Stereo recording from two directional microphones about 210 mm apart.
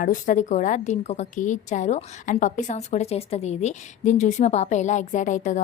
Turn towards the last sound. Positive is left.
turn(degrees=35)  # may be behind; listen again after turning